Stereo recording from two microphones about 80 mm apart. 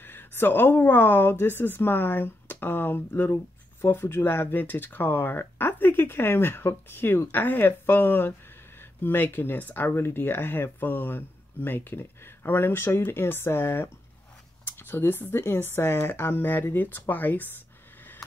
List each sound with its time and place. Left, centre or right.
0.0 s speech: left